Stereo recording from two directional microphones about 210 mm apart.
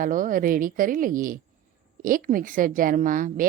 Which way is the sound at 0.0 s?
40° right (ahead or behind).